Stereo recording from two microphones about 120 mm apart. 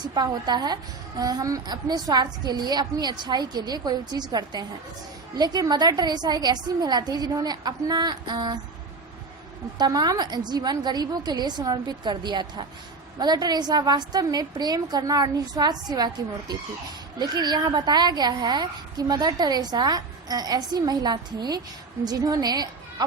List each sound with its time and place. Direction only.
0.1 s a woman's voice: 35° right (ahead or behind)
9.7 s a woman's voice: 35° right (ahead or behind)